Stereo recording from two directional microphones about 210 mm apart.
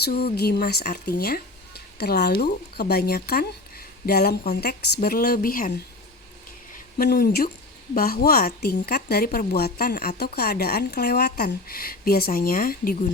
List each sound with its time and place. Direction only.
0.0 s a woman's voice: 50° left (ahead or behind)